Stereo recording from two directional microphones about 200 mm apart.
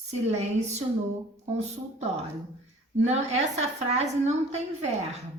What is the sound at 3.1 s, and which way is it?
A woman's voice, 35° right (ahead or behind).